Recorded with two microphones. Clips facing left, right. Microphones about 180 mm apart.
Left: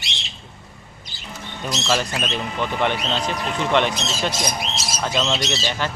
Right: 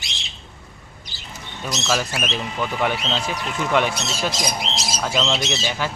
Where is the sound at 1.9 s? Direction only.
Centre (ahead or behind).